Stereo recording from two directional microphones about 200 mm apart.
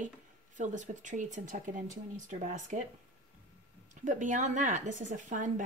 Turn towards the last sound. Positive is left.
turn(degrees=-40)  # may be behind; listen again after turning